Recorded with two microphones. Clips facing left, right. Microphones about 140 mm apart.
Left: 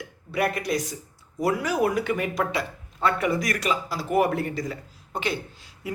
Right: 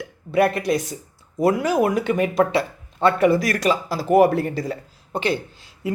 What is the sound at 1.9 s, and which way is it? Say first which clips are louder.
Speech: right 6 dB; 25° right (ahead or behind).